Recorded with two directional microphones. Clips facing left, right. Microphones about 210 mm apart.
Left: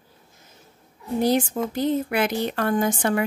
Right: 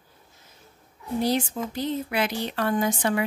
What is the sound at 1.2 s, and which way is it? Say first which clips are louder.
Speech: left 4 dB; 50° left (ahead or behind).